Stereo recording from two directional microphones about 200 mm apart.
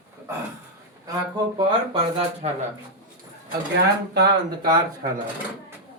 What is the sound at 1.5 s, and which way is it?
Speech, 30° right (ahead or behind).